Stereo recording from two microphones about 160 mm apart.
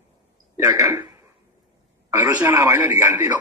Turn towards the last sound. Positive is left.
turn(degrees=-10)  # may be behind; listen again after turning